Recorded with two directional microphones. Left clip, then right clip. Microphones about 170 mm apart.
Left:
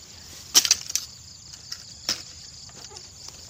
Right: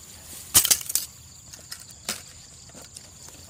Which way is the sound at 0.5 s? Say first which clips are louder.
Left 3 dB; 55° right (ahead or behind).